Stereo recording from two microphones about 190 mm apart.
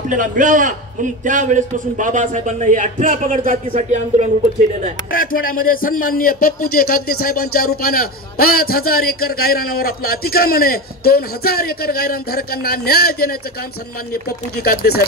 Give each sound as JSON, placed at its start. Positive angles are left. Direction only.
{"t": 0.1, "sound": "a man's voice", "side_deg": -40}
{"t": 5.1, "sound": "a man's voice", "side_deg": 45}